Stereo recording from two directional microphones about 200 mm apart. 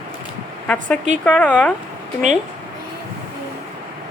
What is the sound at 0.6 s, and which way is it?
A woman's voice, 5° left (ahead or behind).